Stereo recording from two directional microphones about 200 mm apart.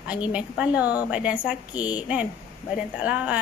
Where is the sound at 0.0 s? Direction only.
5° right (ahead or behind).